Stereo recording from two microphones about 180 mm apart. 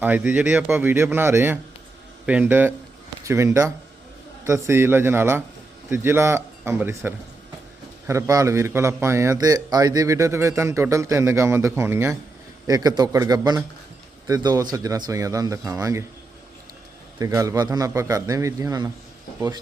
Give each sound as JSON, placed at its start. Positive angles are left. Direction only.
{"t": 0.0, "sound": "a man's voice", "side_deg": -10}
{"t": 17.2, "sound": "speech", "side_deg": -20}